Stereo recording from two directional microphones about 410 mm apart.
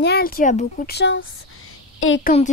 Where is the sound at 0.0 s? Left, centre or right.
Left.